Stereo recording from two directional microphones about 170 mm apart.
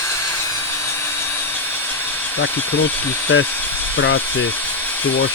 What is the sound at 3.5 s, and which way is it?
Dental drill, 10° left (ahead or behind).